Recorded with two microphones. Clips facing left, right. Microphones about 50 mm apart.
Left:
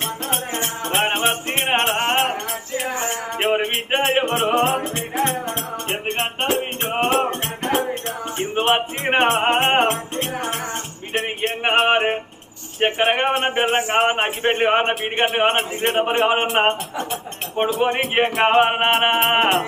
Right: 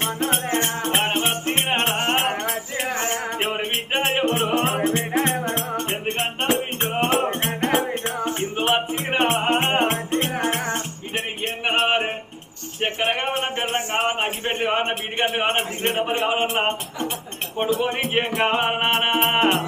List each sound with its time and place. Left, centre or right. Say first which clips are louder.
0.6 s music: even; centre
1.0 s music: left 2 dB; left
1.9 s music: left 2 dB; centre
3.3 s music: left 4 dB; left
4.8 s music: right 2 dB; right
6.8 s music: left 1 dB; centre
7.1 s music: left 1 dB; right
8.5 s speech: left 4 dB; left
9.9 s music: right 2 dB; centre
11.6 s music: left 4 dB; left
13.1 s speech: left 5 dB; left
17.7 s music: left 4 dB; left